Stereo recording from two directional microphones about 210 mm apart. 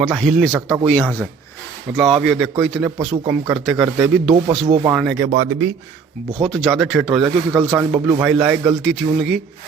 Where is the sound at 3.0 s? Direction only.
30° right (ahead or behind).